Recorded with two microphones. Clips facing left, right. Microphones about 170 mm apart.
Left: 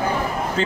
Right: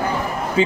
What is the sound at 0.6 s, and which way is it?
Speech, 10° right (ahead or behind).